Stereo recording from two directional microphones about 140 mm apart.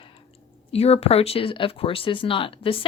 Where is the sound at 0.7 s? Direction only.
45° left (ahead or behind).